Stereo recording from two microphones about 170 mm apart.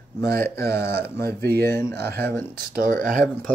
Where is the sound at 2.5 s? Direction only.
55° right (ahead or behind).